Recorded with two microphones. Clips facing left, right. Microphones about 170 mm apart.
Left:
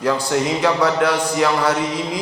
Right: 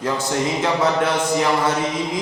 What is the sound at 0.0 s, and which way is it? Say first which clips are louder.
A man's voice: left 3 dB; 25° right (ahead or behind).